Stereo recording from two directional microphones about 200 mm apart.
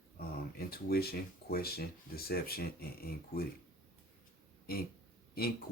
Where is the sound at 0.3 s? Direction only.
50° left (ahead or behind).